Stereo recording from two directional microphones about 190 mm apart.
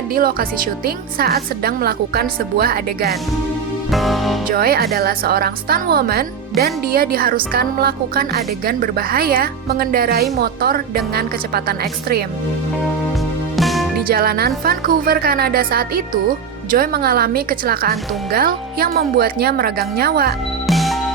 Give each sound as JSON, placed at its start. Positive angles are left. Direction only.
{"t": 0.1, "sound": "speech", "side_deg": -50}
{"t": 3.9, "sound": "music", "side_deg": 0}
{"t": 4.4, "sound": "a woman's voice", "side_deg": -50}
{"t": 13.6, "sound": "music", "side_deg": 0}
{"t": 14.1, "sound": "speech", "side_deg": -55}
{"t": 20.7, "sound": "music", "side_deg": 0}